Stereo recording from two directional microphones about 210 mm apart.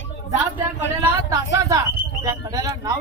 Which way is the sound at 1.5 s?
15° right (ahead or behind).